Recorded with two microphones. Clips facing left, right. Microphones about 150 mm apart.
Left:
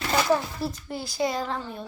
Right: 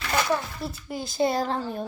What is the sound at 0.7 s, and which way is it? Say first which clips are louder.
Speech: right 1 dB; 15° right (ahead or behind).